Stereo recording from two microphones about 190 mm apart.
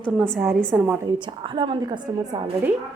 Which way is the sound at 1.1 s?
25° right (ahead or behind).